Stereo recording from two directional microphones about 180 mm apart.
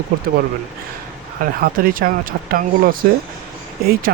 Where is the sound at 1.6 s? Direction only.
55° right (ahead or behind).